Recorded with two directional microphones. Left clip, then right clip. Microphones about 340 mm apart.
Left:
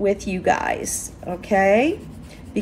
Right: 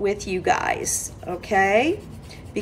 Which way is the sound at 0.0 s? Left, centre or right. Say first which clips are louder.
Left 2 dB; centre.